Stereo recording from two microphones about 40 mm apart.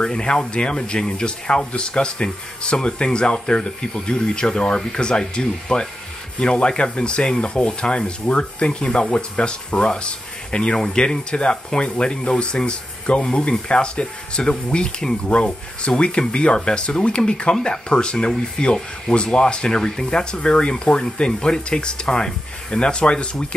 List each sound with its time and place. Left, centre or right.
0.0 s speech: centre